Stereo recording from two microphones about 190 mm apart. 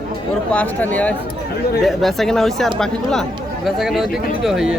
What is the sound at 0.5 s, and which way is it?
Speech, 10° left (ahead or behind).